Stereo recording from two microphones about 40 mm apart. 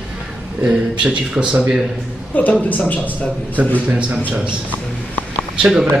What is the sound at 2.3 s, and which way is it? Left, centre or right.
Speech, left.